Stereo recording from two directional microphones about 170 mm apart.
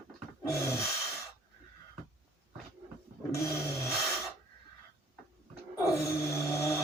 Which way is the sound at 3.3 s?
15° left (ahead or behind).